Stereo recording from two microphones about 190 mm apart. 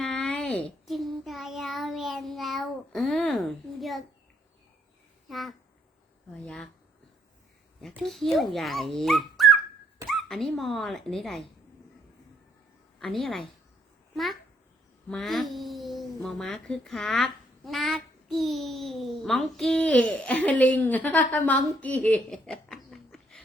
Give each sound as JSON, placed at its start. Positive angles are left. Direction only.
{"t": 0.0, "sound": "child singing", "side_deg": 0}
{"t": 5.3, "sound": "a child's voice", "side_deg": 0}
{"t": 7.8, "sound": "a child's voice", "side_deg": 0}
{"t": 13.2, "sound": "a child's voice", "side_deg": 0}
{"t": 15.1, "sound": "a child's voice", "side_deg": 0}